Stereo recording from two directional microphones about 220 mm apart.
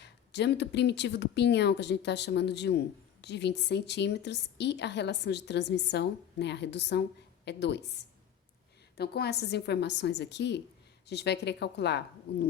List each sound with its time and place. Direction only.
0.0 s speech: 50° left (ahead or behind)